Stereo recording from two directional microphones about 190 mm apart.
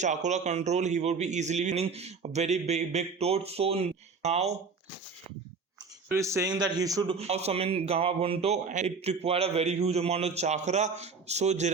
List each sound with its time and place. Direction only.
0.0 s a man's voice: 40° right (ahead or behind)
6.1 s a man's voice: 15° right (ahead or behind)
7.2 s a man's voice: 35° right (ahead or behind)